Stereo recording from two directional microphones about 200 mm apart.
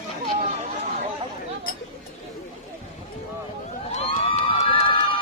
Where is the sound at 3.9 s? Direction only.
35° left (ahead or behind).